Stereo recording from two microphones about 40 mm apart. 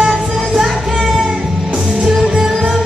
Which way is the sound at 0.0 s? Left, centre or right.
Centre.